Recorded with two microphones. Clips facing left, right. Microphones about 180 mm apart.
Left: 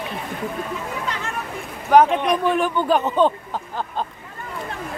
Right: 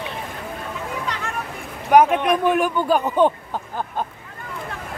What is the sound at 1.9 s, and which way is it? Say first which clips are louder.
Speech: even; 5° right (ahead or behind).